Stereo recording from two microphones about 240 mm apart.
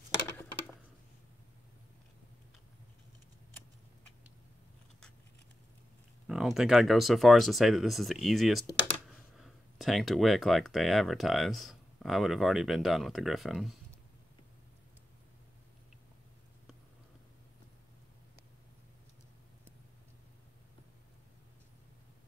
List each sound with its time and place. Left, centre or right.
6.2 s speech: centre
8.6 s speech: left
9.4 s speech: centre